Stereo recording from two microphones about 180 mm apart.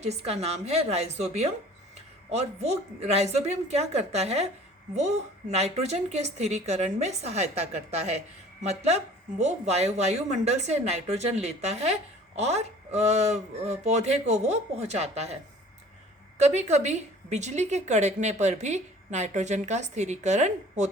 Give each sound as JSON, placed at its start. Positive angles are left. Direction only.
{"t": 0.0, "sound": "a woman's voice", "side_deg": -35}
{"t": 16.4, "sound": "a woman's voice", "side_deg": -40}